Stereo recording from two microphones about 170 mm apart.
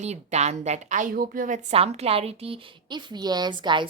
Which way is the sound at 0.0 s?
40° right (ahead or behind).